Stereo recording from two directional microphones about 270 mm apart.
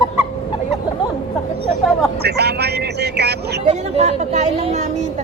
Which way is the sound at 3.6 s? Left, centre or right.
Right.